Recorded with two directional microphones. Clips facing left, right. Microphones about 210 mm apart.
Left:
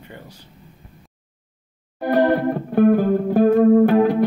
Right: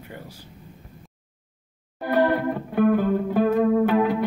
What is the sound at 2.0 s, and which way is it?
Music, 45° left (ahead or behind).